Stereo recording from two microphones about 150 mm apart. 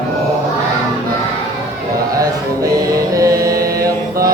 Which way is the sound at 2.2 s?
25° right (ahead or behind).